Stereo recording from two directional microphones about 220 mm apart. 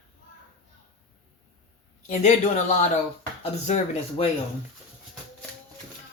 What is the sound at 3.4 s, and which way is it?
Speech, 30° left (ahead or behind).